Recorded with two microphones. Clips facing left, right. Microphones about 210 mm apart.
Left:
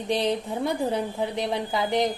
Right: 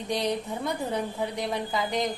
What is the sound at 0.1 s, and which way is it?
A woman's voice, 25° left (ahead or behind).